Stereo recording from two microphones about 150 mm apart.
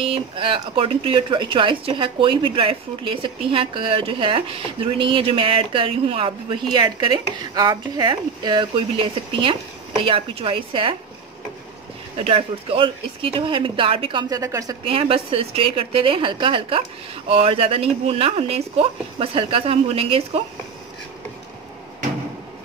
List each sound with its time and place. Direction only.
0.0 s speech: 35° right (ahead or behind)
12.2 s speech: 40° right (ahead or behind)
14.3 s a woman's voice: 20° right (ahead or behind)
14.9 s speech: 40° right (ahead or behind)